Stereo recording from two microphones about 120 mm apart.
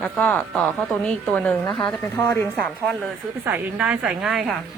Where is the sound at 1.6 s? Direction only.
30° left (ahead or behind).